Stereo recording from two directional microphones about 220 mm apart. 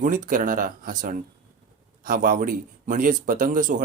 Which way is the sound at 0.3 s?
35° right (ahead or behind).